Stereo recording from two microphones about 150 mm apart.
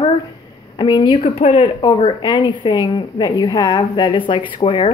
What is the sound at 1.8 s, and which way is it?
A woman's voice, 30° left (ahead or behind).